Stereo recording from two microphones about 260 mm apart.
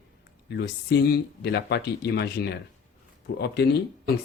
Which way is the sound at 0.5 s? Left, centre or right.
Left.